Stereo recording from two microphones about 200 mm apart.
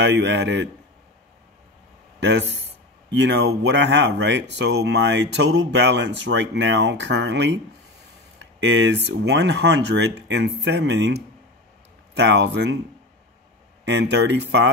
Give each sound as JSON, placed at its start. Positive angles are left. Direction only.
{"t": 0.0, "sound": "speech", "side_deg": -65}
{"t": 2.1, "sound": "speech", "side_deg": -60}
{"t": 13.8, "sound": "speech", "side_deg": -60}